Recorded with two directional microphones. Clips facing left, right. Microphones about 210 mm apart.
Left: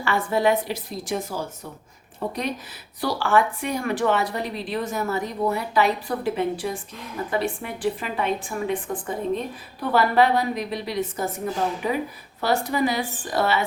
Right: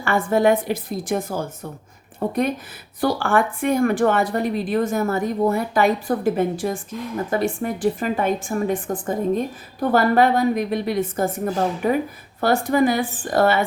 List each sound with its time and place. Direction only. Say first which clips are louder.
0.0 s speech: right 4 dB; 50° right (ahead or behind)